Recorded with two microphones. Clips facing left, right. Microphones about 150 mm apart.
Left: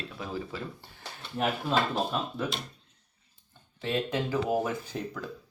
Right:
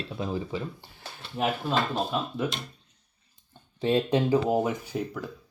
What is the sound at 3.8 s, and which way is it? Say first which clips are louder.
Speech: right 6 dB; 30° right (ahead or behind).